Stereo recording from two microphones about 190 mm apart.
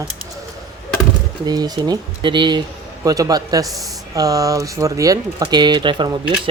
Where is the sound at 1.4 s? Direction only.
20° right (ahead or behind).